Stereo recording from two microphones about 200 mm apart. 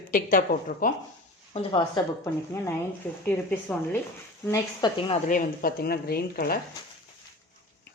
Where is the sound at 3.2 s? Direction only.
5° left (ahead or behind).